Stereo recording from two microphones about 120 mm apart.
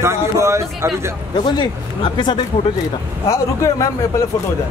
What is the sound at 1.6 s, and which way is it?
Speech, 40° left (ahead or behind).